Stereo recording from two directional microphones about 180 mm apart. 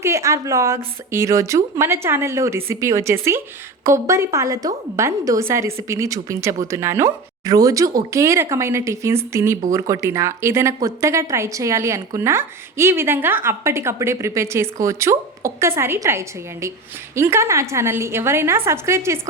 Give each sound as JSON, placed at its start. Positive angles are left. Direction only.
{"t": 0.0, "sound": "a woman's voice", "side_deg": -15}